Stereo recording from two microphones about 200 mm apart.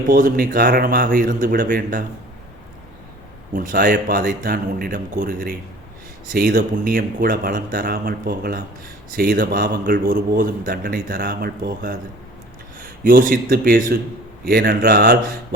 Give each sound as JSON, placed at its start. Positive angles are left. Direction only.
{"t": 0.1, "sound": "speech", "side_deg": -45}
{"t": 3.5, "sound": "a man's voice", "side_deg": -45}